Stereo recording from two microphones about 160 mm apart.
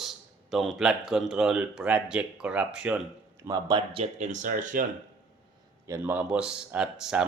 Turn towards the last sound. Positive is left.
turn(degrees=-5)  # may be behind; listen again after turning